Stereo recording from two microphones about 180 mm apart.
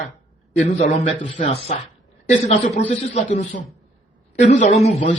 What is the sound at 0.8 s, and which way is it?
A man's voice, 40° left (ahead or behind).